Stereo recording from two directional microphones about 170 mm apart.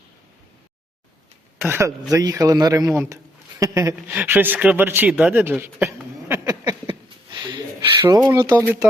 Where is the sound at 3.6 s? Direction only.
20° right (ahead or behind).